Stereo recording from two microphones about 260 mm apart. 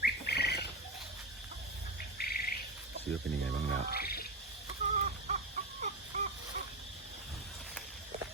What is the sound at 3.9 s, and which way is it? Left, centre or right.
Frog, left.